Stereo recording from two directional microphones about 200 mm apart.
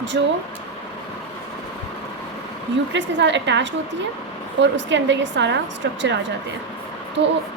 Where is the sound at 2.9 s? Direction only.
65° right (ahead or behind).